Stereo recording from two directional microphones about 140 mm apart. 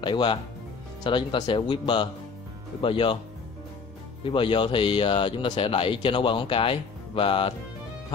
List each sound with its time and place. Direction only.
0.0 s speech: 35° left (ahead or behind)
4.2 s speech: 40° left (ahead or behind)